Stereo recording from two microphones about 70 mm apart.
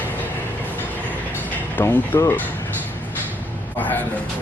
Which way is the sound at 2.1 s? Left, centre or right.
Left.